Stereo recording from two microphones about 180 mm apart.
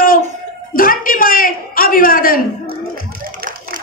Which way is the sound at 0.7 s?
50° left (ahead or behind).